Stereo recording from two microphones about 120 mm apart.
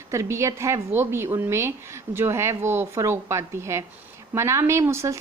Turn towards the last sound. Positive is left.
turn(degrees=-25)  # may be behind; listen again after turning